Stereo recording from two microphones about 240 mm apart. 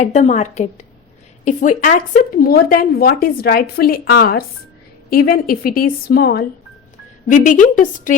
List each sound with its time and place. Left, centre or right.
0.0 s a woman's voice: left